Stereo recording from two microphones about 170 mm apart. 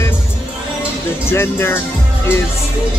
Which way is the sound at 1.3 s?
15° left (ahead or behind).